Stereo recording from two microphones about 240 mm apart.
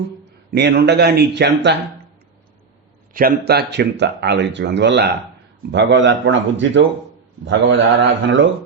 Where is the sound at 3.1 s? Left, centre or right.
Right.